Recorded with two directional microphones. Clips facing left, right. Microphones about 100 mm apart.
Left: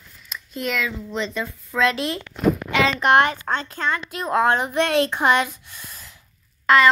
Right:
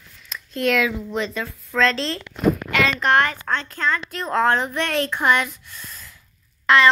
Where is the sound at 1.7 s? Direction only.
15° left (ahead or behind).